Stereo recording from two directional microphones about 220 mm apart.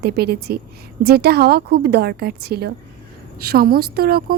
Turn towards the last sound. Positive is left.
turn(degrees=-45)  # may be behind; listen again after turning